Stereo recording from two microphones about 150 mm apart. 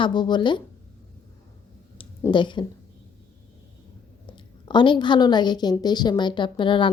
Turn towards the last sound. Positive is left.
turn(degrees=35)  # may be behind; listen again after turning